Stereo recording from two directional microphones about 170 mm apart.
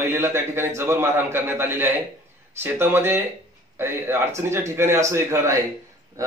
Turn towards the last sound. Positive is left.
turn(degrees=-20)  # may be behind; listen again after turning